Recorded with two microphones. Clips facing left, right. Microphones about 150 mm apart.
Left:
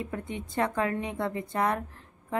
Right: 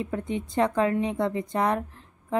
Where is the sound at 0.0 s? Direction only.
20° right (ahead or behind).